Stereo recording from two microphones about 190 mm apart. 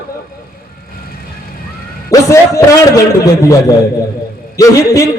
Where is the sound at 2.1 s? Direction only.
15° left (ahead or behind).